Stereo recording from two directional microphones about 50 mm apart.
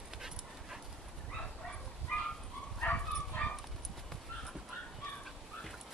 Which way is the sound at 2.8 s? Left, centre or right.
Left.